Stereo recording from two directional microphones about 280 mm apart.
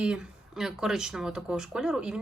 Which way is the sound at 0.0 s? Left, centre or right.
Centre.